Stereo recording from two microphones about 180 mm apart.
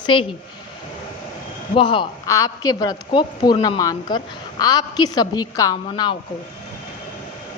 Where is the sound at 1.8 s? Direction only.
25° left (ahead or behind).